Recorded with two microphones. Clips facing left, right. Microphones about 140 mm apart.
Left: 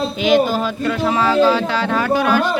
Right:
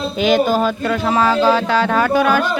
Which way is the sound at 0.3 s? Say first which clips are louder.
Even; 45° right (ahead or behind).